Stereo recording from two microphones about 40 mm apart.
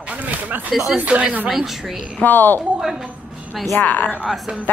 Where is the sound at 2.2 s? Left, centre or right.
Left.